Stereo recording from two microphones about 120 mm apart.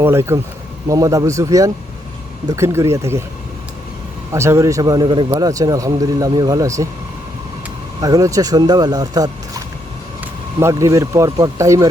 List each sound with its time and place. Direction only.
0.0 s speech: 20° right (ahead or behind)
4.3 s speech: 25° right (ahead or behind)
8.0 s speech: 30° right (ahead or behind)
10.6 s speech: 25° right (ahead or behind)